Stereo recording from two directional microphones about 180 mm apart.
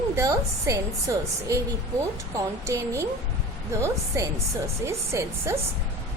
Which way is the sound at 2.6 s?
15° right (ahead or behind).